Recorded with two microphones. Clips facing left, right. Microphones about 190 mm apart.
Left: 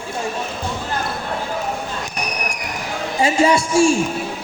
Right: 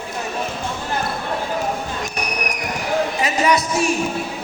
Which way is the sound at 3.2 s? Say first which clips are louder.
Left 8 dB; 30° left (ahead or behind).